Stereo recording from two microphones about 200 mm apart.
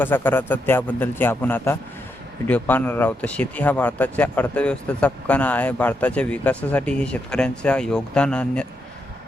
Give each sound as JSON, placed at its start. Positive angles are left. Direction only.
{"t": 0.0, "sound": "speech", "side_deg": 10}